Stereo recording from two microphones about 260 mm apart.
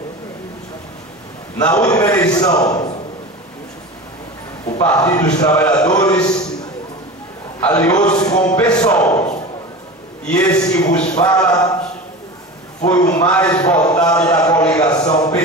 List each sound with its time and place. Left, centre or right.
1.6 s a man's voice: centre
4.6 s a man's voice: centre
7.6 s a man's voice: centre
10.2 s a man's voice: centre
11.0 s a man's voice: left
11.2 s a man's voice: centre
12.8 s a man's voice: centre